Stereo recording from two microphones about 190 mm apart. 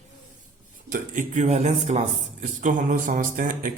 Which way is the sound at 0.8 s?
45° right (ahead or behind).